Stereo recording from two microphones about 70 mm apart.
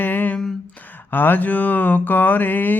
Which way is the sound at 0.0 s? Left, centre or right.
Left.